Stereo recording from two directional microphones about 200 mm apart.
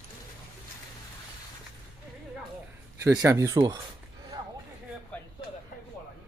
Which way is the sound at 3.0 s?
15° right (ahead or behind).